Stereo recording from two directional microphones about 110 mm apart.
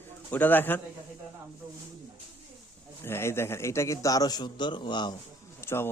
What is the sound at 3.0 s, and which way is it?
A man's voice, 20° left (ahead or behind).